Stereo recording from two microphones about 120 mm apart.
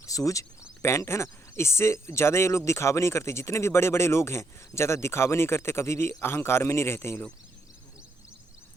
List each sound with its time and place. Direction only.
0.0 s speech: 30° left (ahead or behind)